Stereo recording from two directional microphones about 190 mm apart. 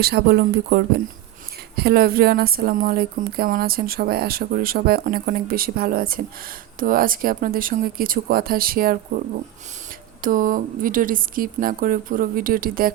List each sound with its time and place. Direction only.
0.0 s speech: 55° right (ahead or behind)
10.2 s speech: 45° right (ahead or behind)